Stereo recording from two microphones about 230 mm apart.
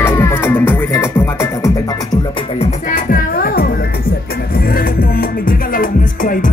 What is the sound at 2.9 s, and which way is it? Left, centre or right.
Music, left.